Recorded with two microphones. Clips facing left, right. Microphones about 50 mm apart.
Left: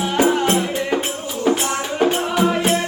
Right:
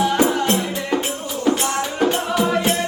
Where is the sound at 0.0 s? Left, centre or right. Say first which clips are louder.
Even; centre.